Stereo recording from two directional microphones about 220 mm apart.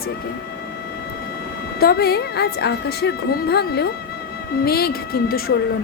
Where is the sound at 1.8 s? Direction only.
45° left (ahead or behind).